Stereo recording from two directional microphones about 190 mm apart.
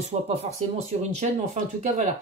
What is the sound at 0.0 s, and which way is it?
Speech, 35° right (ahead or behind).